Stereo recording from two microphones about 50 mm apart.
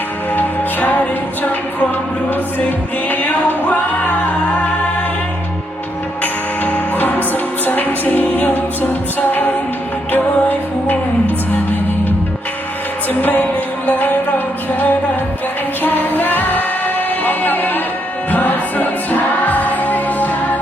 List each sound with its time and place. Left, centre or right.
0.3 s music: left
3.1 s music: left
6.7 s music: left
13.2 s music: left